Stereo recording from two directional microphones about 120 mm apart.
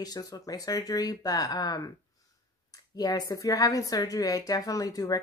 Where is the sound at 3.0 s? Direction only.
35° left (ahead or behind).